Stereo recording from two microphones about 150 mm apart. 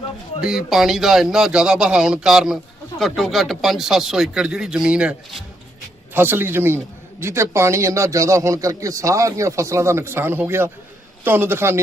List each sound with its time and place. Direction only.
0.4 s a man's voice: centre (ahead or behind)